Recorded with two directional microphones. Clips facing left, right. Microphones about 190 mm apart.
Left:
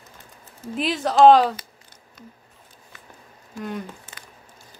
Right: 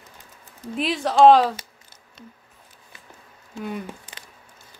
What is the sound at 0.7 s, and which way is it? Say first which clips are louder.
Speech: even; centre (ahead or behind).